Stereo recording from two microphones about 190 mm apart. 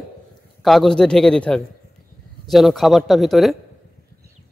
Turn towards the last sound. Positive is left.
turn(degrees=0)  # may be behind; listen again after turning